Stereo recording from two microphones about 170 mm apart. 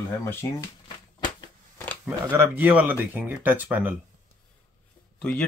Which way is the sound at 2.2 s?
15° right (ahead or behind).